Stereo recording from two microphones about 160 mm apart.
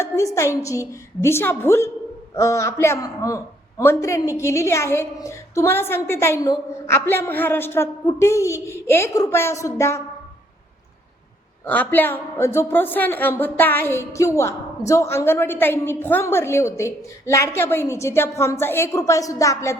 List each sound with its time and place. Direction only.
0.0 s a man's voice: 20° left (ahead or behind)
11.6 s a woman's voice: 10° left (ahead or behind)